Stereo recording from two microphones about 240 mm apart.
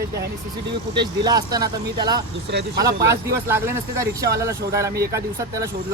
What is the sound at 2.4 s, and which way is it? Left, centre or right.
Speech, right.